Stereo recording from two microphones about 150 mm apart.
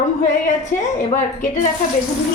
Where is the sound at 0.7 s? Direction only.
15° left (ahead or behind).